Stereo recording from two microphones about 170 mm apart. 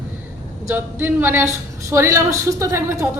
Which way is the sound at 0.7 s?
10° right (ahead or behind).